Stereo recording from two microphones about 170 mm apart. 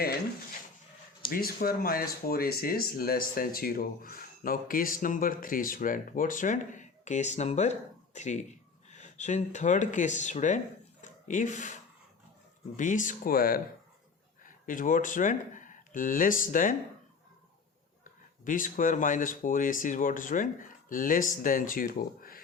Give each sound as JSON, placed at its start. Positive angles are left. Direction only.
{"t": 1.3, "sound": "speech", "side_deg": 60}
{"t": 18.0, "sound": "speech", "side_deg": 50}